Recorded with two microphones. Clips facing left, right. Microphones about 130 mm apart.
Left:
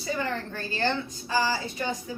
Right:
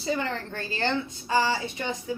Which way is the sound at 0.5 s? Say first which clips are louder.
Right 1 dB; 30° right (ahead or behind).